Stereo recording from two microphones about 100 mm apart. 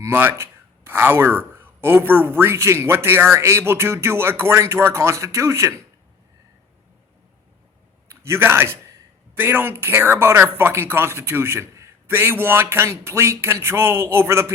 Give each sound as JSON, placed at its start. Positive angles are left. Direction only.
{"t": 0.0, "sound": "speech", "side_deg": -20}
{"t": 8.1, "sound": "a man's voice", "side_deg": -25}